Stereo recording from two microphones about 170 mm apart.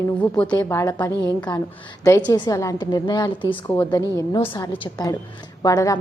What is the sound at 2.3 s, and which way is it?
A woman's voice, 20° left (ahead or behind).